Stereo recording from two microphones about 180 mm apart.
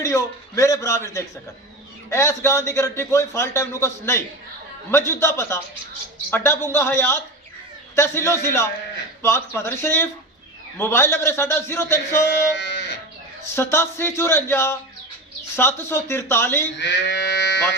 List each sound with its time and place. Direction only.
0.0 s a man's voice: 15° left (ahead or behind)
12.5 s a sound: 70° left (ahead or behind)
13.6 s a man's voice: 15° left (ahead or behind)
16.7 s speech: 80° left